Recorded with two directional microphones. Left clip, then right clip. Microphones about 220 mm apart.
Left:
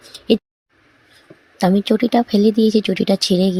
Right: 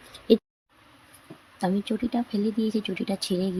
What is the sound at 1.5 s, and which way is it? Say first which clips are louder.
Speech: left 12 dB; 40° left (ahead or behind).